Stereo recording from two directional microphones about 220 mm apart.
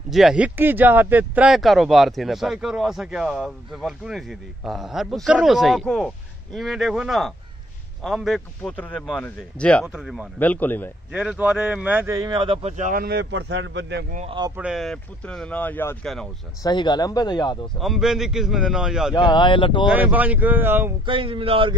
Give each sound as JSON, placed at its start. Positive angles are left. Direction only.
{"t": 0.1, "sound": "a man's voice", "side_deg": 0}
{"t": 11.1, "sound": "speech", "side_deg": -5}
{"t": 14.1, "sound": "speech", "side_deg": -25}
{"t": 14.6, "sound": "speech", "side_deg": 0}
{"t": 16.6, "sound": "speech", "side_deg": 20}
{"t": 17.7, "sound": "speech", "side_deg": 0}
{"t": 19.1, "sound": "speech", "side_deg": 20}
{"t": 19.9, "sound": "speech", "side_deg": -5}
{"t": 21.0, "sound": "speech", "side_deg": -25}